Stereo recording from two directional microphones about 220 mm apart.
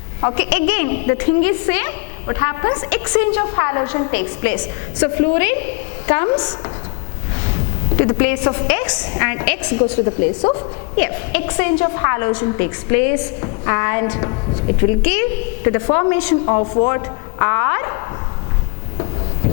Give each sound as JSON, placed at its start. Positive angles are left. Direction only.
{"t": 0.2, "sound": "a man's voice", "side_deg": 20}
{"t": 0.5, "sound": "a woman's voice", "side_deg": 10}
{"t": 7.9, "sound": "a woman's voice", "side_deg": 15}
{"t": 9.8, "sound": "a woman's voice", "side_deg": 25}
{"t": 10.9, "sound": "a woman's voice", "side_deg": 10}
{"t": 16.5, "sound": "a woman's voice", "side_deg": 20}